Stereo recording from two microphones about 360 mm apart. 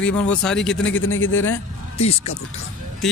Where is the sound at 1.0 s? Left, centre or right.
Left.